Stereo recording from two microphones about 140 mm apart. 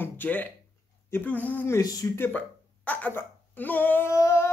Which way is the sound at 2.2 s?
15° left (ahead or behind).